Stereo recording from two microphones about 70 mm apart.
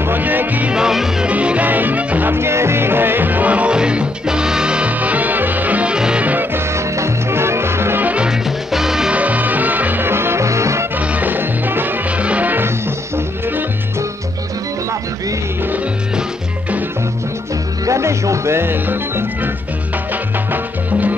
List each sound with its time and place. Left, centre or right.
0.0 s music: right
0.7 s music: centre
1.3 s music: centre
6.2 s music: right
6.7 s music: right
8.0 s music: right
8.3 s music: centre
9.1 s music: right
11.0 s music: right
17.8 s music: right